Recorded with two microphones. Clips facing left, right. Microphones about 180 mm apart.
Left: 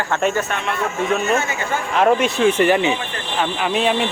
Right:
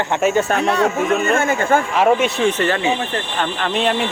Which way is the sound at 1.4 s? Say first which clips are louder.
Right 7 dB; 50° right (ahead or behind).